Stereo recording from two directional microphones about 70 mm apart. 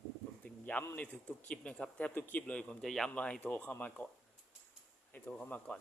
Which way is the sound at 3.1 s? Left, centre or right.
Centre.